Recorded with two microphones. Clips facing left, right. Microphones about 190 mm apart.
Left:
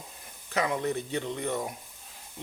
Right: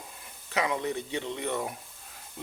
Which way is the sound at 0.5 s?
40° left (ahead or behind).